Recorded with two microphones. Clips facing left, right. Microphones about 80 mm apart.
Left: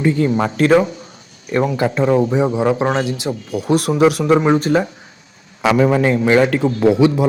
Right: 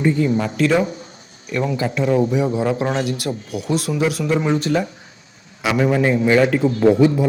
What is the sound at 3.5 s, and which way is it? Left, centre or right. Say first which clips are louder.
Speech: left 6 dB; left.